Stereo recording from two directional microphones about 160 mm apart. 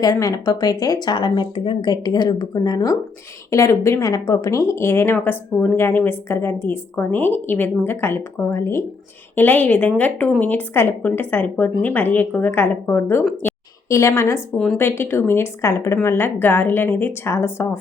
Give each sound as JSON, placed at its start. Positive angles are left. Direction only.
{"t": 0.0, "sound": "speech", "side_deg": 20}
{"t": 13.4, "sound": "a sound", "side_deg": 10}
{"t": 13.9, "sound": "speech", "side_deg": 20}